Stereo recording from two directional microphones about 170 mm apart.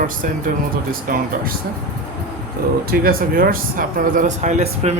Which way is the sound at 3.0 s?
60° right (ahead or behind).